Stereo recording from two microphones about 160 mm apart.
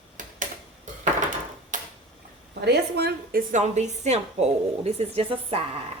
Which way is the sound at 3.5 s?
45° right (ahead or behind).